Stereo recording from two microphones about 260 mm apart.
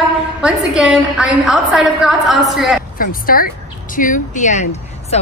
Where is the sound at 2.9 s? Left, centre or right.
Left.